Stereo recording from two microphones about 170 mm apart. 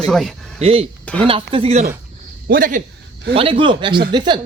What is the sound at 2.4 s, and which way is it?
Speech, 55° right (ahead or behind).